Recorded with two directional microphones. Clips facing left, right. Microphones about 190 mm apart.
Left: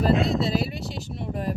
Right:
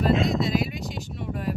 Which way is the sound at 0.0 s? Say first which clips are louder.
Left 1 dB; 35° left (ahead or behind).